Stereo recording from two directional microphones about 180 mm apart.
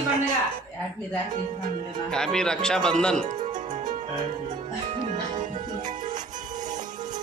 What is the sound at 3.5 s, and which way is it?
Music, 45° right (ahead or behind).